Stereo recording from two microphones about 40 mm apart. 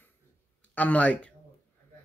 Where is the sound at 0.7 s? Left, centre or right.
Left.